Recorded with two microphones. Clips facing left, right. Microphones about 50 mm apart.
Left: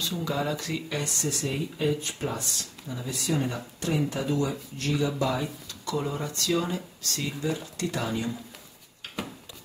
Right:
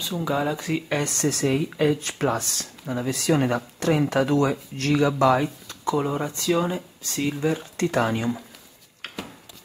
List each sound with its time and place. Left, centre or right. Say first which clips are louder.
0.0 s speech: right 4 dB; centre
0.8 s speech: right 6 dB; right
2.9 s speech: right 7 dB; right
5.9 s speech: right 6 dB; right
7.8 s speech: right 8 dB; right
9.0 s a sound: right 4 dB; right